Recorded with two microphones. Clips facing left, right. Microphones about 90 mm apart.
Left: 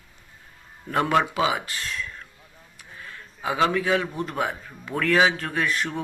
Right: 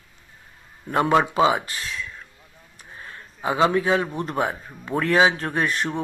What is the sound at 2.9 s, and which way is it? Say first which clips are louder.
A man's voice: right 1 dB; 30° right (ahead or behind).